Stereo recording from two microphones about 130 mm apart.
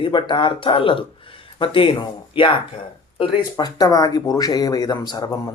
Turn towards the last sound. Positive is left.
turn(degrees=30)  # may be behind; listen again after turning